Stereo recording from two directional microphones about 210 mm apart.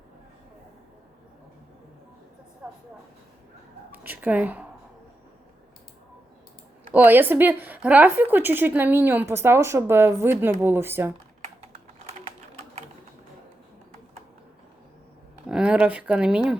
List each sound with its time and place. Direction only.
2.6 s train: 5° right (ahead or behind)
3.9 s speech: 10° right (ahead or behind)
6.9 s speech: 10° right (ahead or behind)
15.4 s speech: 5° right (ahead or behind)